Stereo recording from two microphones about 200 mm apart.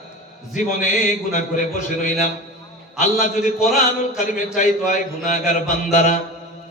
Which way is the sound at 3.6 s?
Centre (ahead or behind).